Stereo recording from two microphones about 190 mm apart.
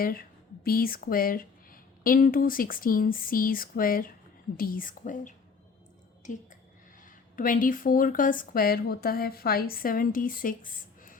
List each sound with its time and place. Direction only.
0.0 s speech: 50° left (ahead or behind)
7.0 s speech: 45° left (ahead or behind)